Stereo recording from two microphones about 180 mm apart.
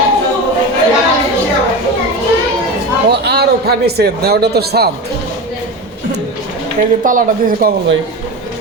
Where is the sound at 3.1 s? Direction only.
65° right (ahead or behind).